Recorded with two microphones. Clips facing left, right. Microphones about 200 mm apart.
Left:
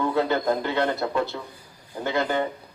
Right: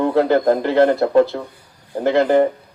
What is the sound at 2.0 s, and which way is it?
Speech, 35° right (ahead or behind).